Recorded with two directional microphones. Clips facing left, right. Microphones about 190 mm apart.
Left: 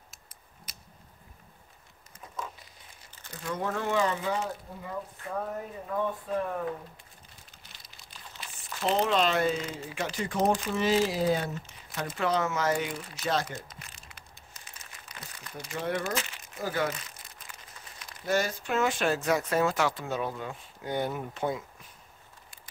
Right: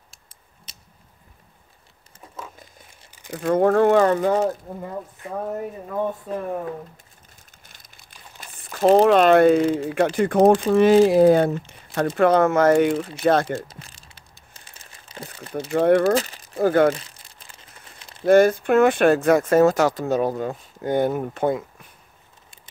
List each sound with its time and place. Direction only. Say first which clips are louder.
0.7 s a sound: even; 25° right (ahead or behind)
3.3 s speech: right 15 dB; 60° right (ahead or behind)
7.6 s speech: right 1 dB; 50° right (ahead or behind)
13.6 s a sound: right 8 dB; 30° right (ahead or behind)
14.5 s crumpling: right 2 dB; 30° right (ahead or behind)
15.7 s speech: right 15 dB; 55° right (ahead or behind)
16.2 s crumpling: right 11 dB; 35° right (ahead or behind)
16.5 s speech: right 14 dB; 55° right (ahead or behind)
16.9 s crumpling: right 6 dB; 30° right (ahead or behind)
18.2 s speech: right 14 dB; 55° right (ahead or behind)